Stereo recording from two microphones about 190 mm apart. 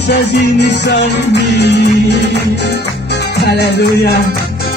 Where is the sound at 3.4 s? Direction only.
60° left (ahead or behind).